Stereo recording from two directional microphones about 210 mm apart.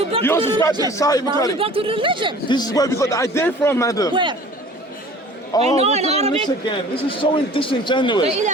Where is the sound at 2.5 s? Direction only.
20° left (ahead or behind).